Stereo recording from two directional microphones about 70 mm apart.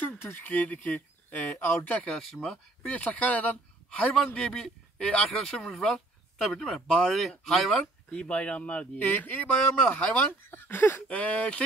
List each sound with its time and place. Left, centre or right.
0.2 s speech: left
2.0 s speech: centre
2.5 s speech: centre
4.1 s speech: centre
7.8 s speech: centre
10.5 s speech: left
11.1 s speech: centre